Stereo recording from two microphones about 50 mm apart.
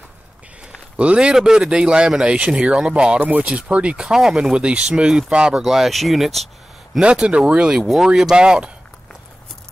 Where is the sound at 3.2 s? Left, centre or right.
Right.